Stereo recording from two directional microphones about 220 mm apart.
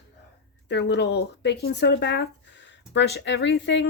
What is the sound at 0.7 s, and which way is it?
Speech, 50° left (ahead or behind).